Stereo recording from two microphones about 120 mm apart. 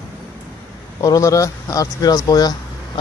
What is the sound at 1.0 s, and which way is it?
Speech, 25° left (ahead or behind).